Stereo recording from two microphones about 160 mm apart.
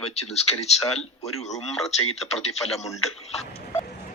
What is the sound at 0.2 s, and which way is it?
A man's voice, 40° left (ahead or behind).